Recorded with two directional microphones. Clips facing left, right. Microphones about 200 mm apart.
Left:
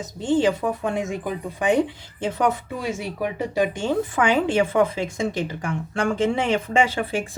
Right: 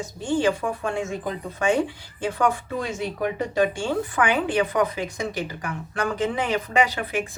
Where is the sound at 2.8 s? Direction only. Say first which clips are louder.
Even; 10° left (ahead or behind).